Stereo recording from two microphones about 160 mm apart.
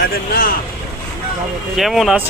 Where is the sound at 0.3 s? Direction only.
70° left (ahead or behind).